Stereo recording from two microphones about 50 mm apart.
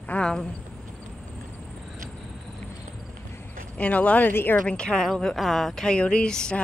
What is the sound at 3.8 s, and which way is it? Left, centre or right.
Speech, left.